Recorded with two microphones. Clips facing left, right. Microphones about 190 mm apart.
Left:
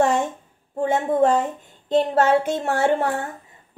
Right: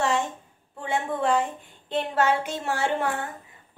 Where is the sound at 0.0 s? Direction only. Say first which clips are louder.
Left 6 dB; 50° left (ahead or behind).